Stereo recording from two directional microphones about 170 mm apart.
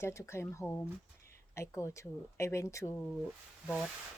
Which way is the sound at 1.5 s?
15° left (ahead or behind).